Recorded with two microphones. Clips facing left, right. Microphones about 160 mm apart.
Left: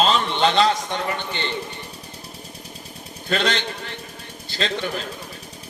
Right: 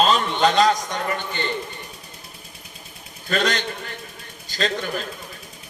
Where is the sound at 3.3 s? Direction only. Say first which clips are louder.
Even; 45° right (ahead or behind).